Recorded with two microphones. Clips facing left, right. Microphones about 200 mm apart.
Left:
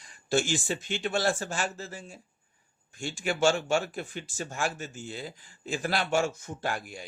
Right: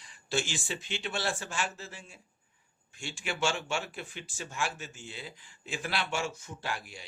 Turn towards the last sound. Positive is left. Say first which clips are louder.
# left 5 dB
turn(degrees=45)  # may be behind; listen again after turning